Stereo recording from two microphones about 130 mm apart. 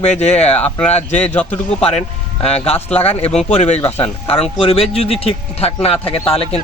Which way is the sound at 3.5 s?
55° left (ahead or behind).